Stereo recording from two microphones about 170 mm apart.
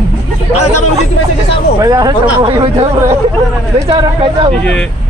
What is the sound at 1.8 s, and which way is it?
Speech, 25° right (ahead or behind).